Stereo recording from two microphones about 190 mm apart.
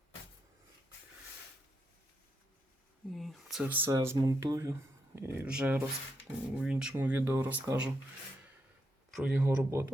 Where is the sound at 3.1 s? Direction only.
Centre (ahead or behind).